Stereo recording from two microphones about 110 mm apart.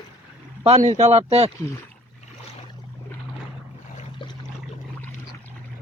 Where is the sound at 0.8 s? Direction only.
85° right; by 1.5 s 65° right (ahead or behind).